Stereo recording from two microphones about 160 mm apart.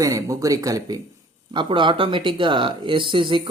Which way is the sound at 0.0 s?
20° right (ahead or behind).